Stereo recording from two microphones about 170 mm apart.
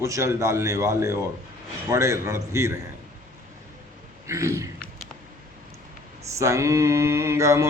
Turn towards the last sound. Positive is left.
turn(degrees=-15)  # may be behind; listen again after turning